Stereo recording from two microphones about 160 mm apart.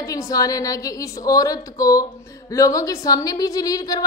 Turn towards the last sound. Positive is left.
turn(degrees=20)  # may be behind; listen again after turning